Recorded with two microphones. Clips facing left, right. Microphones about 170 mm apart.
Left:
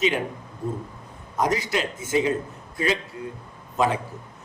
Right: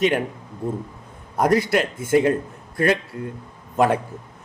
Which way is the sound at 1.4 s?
55° right (ahead or behind).